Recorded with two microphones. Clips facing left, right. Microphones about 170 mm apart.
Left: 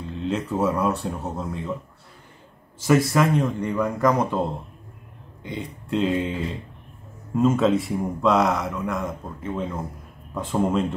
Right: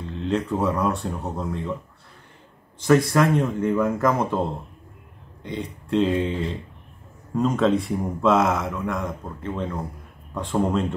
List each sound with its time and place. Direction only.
0.2 s speech: 5° left (ahead or behind)
3.1 s speech: centre (ahead or behind)
7.3 s speech: 5° left (ahead or behind)